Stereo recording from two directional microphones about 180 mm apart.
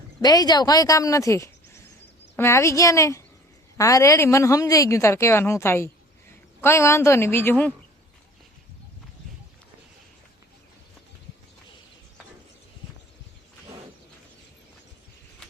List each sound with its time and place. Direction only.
0.2 s a woman's voice: 20° left (ahead or behind)